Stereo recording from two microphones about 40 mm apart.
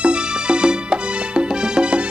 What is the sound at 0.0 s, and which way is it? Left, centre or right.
Music, right.